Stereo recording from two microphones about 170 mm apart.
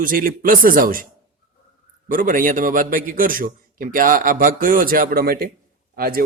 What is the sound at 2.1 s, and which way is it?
A man's voice, 55° right (ahead or behind).